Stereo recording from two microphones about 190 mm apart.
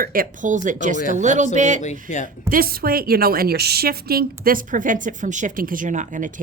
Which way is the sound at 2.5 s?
50° right (ahead or behind).